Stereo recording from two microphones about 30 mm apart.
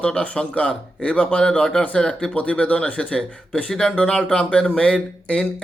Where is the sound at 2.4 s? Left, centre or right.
Left.